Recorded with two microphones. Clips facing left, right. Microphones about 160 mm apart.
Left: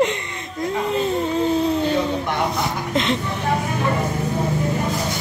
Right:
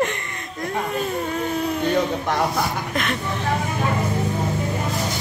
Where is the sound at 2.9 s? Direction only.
20° left (ahead or behind).